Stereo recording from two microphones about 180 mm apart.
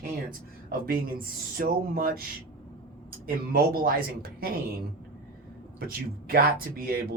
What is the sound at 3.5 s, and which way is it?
Speech, 55° right (ahead or behind).